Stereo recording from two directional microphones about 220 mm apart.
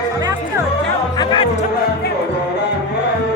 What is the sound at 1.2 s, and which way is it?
Music, 20° left (ahead or behind).